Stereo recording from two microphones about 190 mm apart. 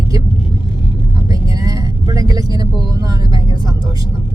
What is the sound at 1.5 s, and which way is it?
Vehicle, 20° right (ahead or behind).